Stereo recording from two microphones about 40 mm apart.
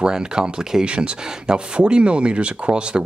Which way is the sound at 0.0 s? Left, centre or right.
Centre.